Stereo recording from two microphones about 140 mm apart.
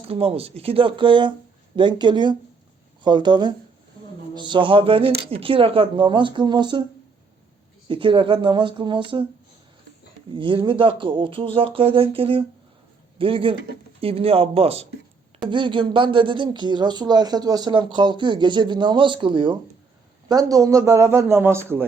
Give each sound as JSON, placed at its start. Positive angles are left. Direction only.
{"t": 0.1, "sound": "speech", "side_deg": -45}
{"t": 7.9, "sound": "speech", "side_deg": -40}
{"t": 10.3, "sound": "a man's voice", "side_deg": -35}